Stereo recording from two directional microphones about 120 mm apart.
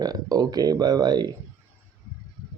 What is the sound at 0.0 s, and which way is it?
Speech, 30° right (ahead or behind).